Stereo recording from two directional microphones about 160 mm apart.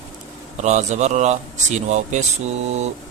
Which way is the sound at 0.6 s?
45° right (ahead or behind).